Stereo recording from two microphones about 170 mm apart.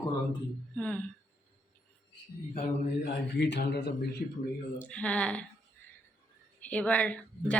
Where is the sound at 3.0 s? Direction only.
90° left.